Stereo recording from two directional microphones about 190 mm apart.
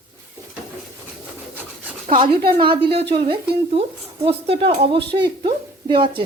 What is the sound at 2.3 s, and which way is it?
Speech, 55° right (ahead or behind).